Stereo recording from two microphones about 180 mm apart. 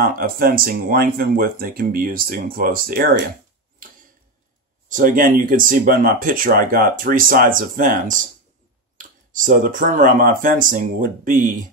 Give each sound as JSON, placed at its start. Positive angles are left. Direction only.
{"t": 0.0, "sound": "speech", "side_deg": -55}
{"t": 4.8, "sound": "speech", "side_deg": -50}